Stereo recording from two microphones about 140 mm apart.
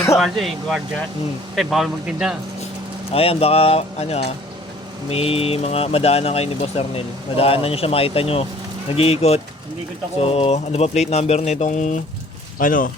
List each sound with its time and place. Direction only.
0.2 s a man's voice: centre (ahead or behind)
3.1 s speech: 45° left (ahead or behind)
12.5 s speech: 75° left (ahead or behind)